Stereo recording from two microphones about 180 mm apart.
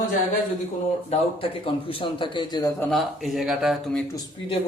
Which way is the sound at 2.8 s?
Centre (ahead or behind).